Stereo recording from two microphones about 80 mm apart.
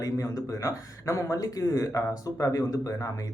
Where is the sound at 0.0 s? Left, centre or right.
Left.